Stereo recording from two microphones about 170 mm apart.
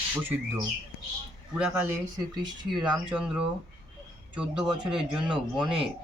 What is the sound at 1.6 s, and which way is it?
Speech, 5° right (ahead or behind).